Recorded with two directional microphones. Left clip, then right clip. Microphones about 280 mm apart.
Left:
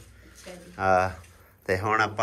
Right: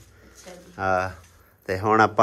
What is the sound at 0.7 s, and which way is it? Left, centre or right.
Speech, centre.